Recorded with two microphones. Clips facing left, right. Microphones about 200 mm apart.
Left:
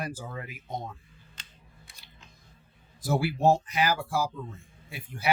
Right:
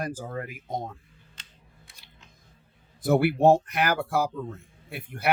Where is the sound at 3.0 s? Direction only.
60° right (ahead or behind).